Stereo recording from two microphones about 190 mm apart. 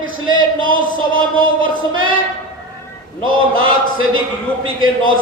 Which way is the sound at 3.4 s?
90° right.